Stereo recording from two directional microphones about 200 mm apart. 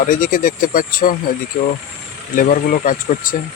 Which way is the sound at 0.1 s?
40° left (ahead or behind).